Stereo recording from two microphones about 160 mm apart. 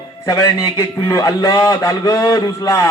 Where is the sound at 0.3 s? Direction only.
20° left (ahead or behind).